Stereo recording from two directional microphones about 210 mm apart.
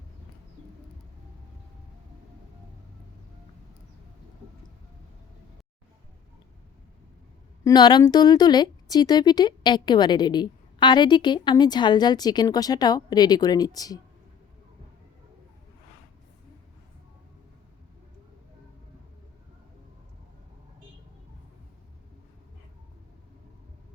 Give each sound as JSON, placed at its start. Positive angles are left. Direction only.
{"t": 7.6, "sound": "a woman's voice", "side_deg": 20}